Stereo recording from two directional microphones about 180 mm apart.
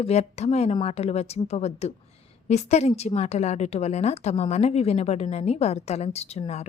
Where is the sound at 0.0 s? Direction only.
35° left (ahead or behind).